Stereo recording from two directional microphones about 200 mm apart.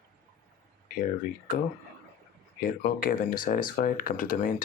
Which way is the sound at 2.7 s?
45° left (ahead or behind).